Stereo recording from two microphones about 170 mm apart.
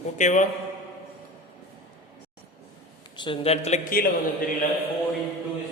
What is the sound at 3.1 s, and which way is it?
Speech, 30° left (ahead or behind).